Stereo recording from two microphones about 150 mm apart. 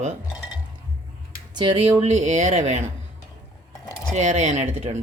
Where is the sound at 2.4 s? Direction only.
50° right (ahead or behind).